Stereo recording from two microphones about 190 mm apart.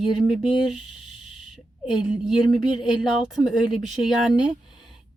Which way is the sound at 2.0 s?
5° right (ahead or behind).